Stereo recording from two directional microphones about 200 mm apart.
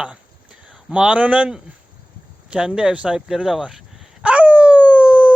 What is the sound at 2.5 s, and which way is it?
Dog, 5° right (ahead or behind).